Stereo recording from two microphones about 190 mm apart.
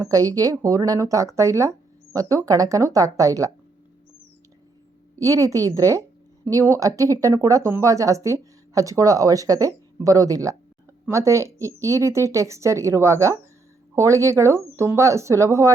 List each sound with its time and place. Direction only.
0.0 s a woman's voice: 20° right (ahead or behind)
5.1 s a woman's voice: 15° right (ahead or behind)